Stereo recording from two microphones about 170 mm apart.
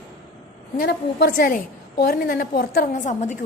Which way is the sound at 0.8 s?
65° left (ahead or behind).